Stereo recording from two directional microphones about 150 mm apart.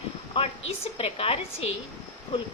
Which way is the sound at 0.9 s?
40° left (ahead or behind).